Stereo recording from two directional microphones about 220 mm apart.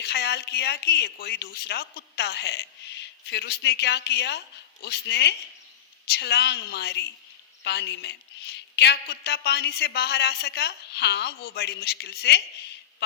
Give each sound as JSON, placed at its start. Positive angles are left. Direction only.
{"t": 0.0, "sound": "a woman's voice", "side_deg": 50}